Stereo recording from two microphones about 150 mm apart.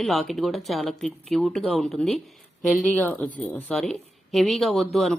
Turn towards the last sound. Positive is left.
turn(degrees=0)  # may be behind; listen again after turning